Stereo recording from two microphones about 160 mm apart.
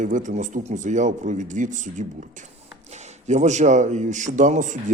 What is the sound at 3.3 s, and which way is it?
Speech, 45° right (ahead or behind).